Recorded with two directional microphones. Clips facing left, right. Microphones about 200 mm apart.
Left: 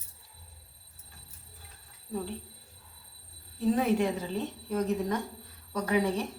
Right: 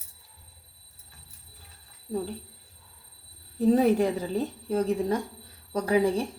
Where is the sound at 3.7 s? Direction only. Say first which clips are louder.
Right 5 dB; 35° right (ahead or behind).